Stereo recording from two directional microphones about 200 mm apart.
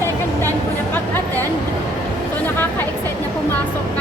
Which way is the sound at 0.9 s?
10° left (ahead or behind).